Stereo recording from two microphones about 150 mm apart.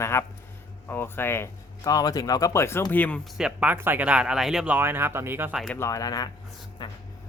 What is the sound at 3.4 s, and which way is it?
Speech, 5° right (ahead or behind).